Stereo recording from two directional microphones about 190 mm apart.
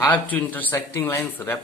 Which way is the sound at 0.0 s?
10° left (ahead or behind).